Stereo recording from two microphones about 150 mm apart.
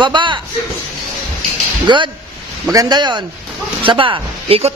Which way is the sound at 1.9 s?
30° right (ahead or behind).